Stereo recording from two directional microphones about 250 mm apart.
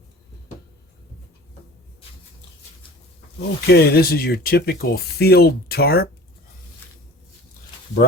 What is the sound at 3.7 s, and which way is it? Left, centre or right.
Speech, left.